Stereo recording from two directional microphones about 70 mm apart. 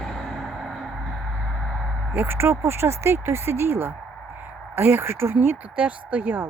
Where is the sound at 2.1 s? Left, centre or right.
Right.